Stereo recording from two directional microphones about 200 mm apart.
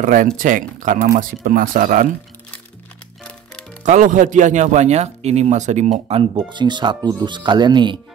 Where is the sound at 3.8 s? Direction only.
40° right (ahead or behind); by 7.9 s 20° right (ahead or behind).